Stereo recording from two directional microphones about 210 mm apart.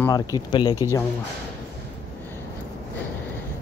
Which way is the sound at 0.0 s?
15° left (ahead or behind).